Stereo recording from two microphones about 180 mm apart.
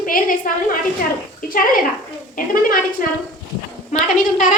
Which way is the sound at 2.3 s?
50° left (ahead or behind).